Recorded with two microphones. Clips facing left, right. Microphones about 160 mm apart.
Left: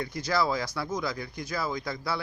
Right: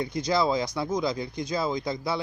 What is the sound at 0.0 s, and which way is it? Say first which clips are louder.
Speech: right 3 dB; 20° right (ahead or behind).